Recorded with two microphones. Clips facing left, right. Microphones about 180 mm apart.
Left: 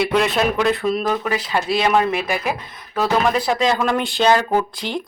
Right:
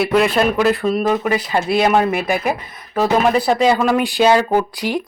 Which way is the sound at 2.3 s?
50° right (ahead or behind).